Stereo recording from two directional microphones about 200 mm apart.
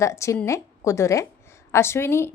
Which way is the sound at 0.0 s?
15° left (ahead or behind).